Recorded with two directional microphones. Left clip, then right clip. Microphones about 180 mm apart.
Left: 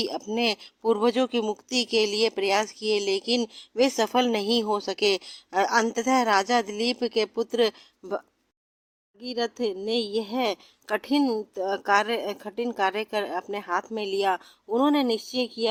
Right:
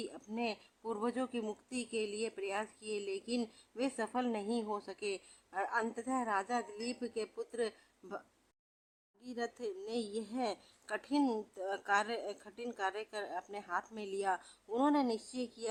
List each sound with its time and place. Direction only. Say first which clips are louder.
0.0 s speech: left 14 dB; 35° left (ahead or behind)
9.2 s a woman's voice: left 13 dB; 25° left (ahead or behind)
11.2 s a woman's voice: left 10 dB; 15° left (ahead or behind)